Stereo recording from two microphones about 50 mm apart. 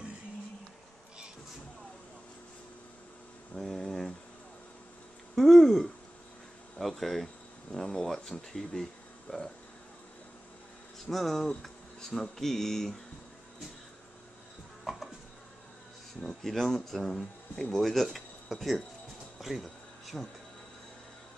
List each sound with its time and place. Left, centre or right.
3.5 s a sound: centre
5.3 s speech: centre
9.3 s speech: left
11.1 s speech: centre
16.2 s speech: centre
19.4 s a sound: centre